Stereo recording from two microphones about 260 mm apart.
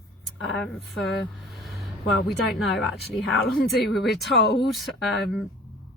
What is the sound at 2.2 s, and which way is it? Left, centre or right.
Speech, centre.